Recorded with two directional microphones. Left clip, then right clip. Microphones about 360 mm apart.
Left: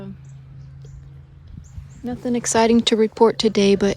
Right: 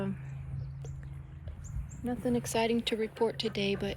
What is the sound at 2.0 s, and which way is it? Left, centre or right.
Speech, left.